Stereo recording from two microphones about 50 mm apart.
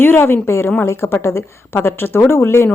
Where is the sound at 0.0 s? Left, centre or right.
Left.